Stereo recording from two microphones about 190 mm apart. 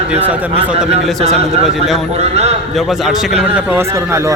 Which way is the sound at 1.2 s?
35° right (ahead or behind).